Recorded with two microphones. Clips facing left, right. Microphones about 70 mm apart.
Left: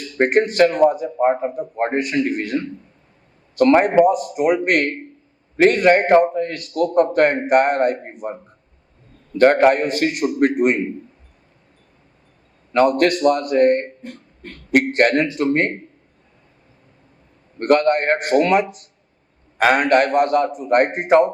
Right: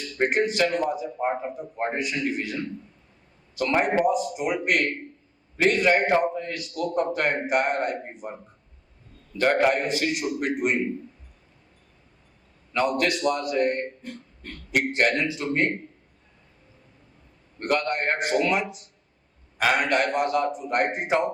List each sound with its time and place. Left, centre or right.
0.2 s a man's voice: left
9.4 s a man's voice: left
12.7 s a man's voice: left
17.6 s a man's voice: left